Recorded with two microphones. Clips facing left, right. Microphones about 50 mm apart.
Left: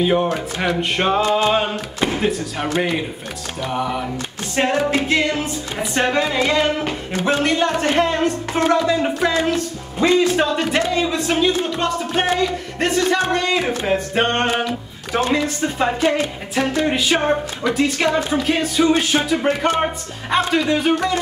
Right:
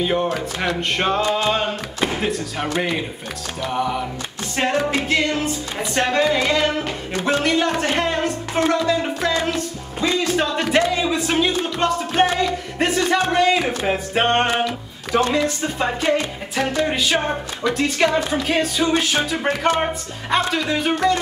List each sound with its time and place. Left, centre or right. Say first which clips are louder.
0.0 s music: left 3 dB; centre
10.0 s speech: left 5 dB; left
10.3 s music: left 1 dB; centre
14.7 s music: right 1 dB; centre